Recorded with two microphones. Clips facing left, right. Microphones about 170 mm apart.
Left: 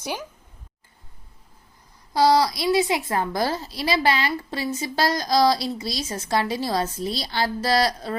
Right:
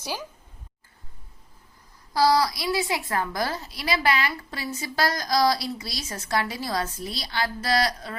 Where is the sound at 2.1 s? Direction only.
25° left (ahead or behind).